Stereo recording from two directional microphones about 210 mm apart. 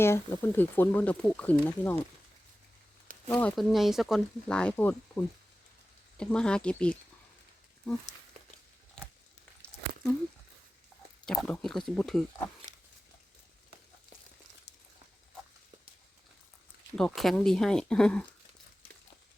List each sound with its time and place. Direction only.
0.0 s speech: 10° left (ahead or behind)
3.2 s speech: 5° left (ahead or behind)
11.3 s speech: 5° left (ahead or behind)
16.9 s speech: centre (ahead or behind)